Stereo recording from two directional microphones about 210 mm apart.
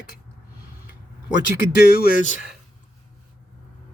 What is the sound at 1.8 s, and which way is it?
Speech, 50° left (ahead or behind).